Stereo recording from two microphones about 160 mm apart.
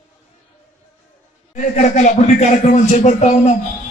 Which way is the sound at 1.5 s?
50° left (ahead or behind).